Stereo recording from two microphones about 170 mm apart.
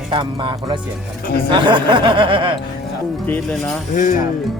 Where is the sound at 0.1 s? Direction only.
30° right (ahead or behind).